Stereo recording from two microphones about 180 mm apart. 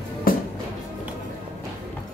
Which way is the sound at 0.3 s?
50° left (ahead or behind).